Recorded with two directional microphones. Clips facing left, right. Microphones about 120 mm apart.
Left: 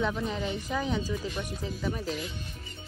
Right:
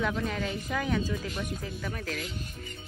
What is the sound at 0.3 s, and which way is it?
Speech, 20° left (ahead or behind).